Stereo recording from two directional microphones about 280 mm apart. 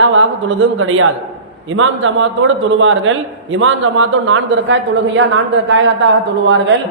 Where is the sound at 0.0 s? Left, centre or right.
Right.